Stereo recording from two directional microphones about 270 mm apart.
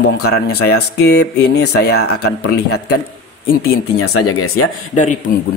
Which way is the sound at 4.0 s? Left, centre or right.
Left.